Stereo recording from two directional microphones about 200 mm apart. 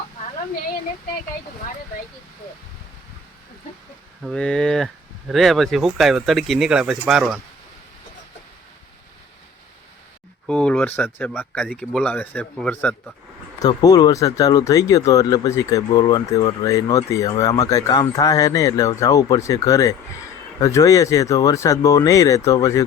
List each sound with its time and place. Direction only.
4.2 s speech: 5° left (ahead or behind)
10.4 s speech: 5° left (ahead or behind)
13.6 s speech: 20° left (ahead or behind)